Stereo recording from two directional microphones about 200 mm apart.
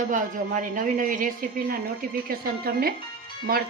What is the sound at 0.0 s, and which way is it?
Speech, 40° right (ahead or behind).